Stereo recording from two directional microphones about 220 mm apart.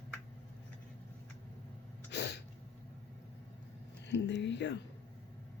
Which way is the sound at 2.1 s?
50° left (ahead or behind).